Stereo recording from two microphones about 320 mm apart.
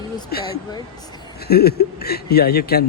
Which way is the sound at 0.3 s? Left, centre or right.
Left.